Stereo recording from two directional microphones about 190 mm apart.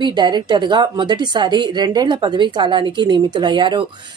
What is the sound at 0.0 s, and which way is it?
Speech, 25° right (ahead or behind).